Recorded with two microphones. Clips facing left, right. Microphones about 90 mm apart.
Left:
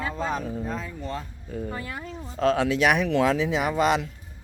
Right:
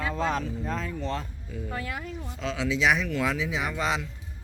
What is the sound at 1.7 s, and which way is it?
Speech, 5° left (ahead or behind).